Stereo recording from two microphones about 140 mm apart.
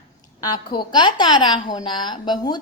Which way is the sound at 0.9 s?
30° left (ahead or behind).